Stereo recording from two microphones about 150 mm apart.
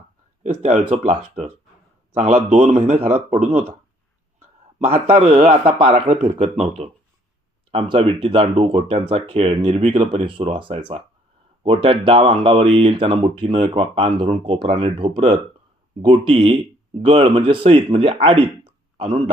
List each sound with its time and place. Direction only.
0.4 s a man's voice: 50° right (ahead or behind)
2.1 s a man's voice: 45° right (ahead or behind)
4.8 s a man's voice: 40° right (ahead or behind)